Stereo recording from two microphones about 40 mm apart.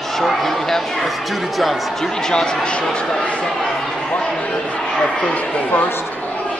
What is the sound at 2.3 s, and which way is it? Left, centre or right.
Speech, left.